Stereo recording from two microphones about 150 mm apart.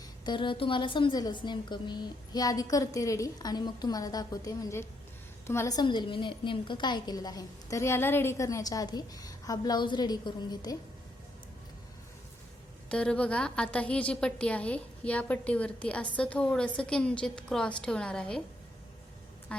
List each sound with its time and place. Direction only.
0.3 s a woman's voice: 35° left (ahead or behind)
12.9 s a woman's voice: 5° left (ahead or behind)
19.5 s quack: 5° left (ahead or behind)